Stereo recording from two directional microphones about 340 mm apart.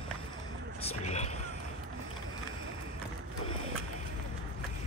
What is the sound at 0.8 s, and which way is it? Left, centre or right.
Vehicle, centre.